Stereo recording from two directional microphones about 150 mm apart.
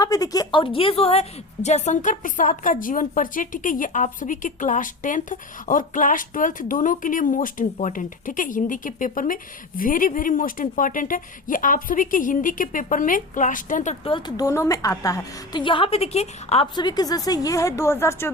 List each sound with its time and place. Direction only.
0.0 s a woman's voice: 25° left (ahead or behind); by 13.9 s 60° left (ahead or behind)
14.0 s a woman's voice: 35° left (ahead or behind)
16.7 s a woman's voice: 25° left (ahead or behind)